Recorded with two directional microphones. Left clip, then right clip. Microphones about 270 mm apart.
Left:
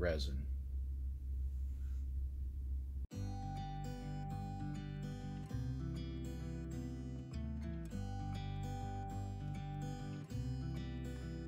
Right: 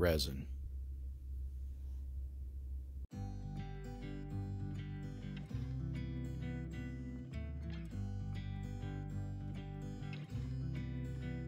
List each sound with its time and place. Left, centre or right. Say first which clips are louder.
0.0 s speech: right 5 dB; right
3.1 s music: left 4 dB; centre